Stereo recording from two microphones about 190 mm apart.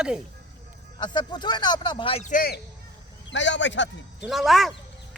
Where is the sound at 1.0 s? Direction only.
25° left (ahead or behind); by 2.6 s 50° left (ahead or behind).